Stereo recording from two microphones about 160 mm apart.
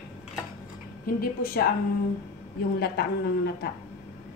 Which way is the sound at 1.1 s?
70° left (ahead or behind).